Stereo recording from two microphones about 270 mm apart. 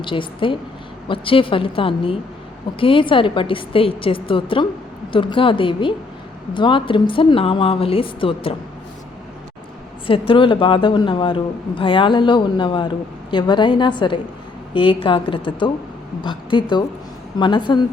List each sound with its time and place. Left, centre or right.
0.0 s a woman's voice: centre
10.1 s a woman's voice: centre